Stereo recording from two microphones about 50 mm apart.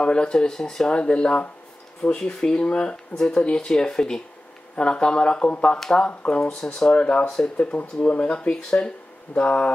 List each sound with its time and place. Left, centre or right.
0.0 s speech: centre
3.2 s speech: centre
6.9 s speech: left
7.2 s speech: centre
7.5 s speech: left